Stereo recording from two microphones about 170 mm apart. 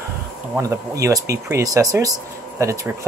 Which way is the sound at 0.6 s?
20° right (ahead or behind).